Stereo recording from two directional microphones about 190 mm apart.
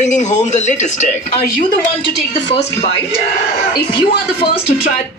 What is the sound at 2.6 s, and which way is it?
Speech, 35° left (ahead or behind).